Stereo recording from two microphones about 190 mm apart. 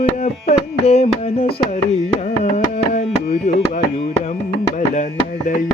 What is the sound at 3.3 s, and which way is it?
Tabla, 45° left (ahead or behind).